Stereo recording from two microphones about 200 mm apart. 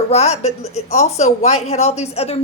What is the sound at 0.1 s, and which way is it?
A woman's voice, 35° left (ahead or behind).